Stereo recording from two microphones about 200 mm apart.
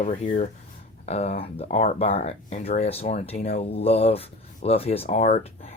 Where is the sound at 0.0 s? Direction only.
40° left (ahead or behind).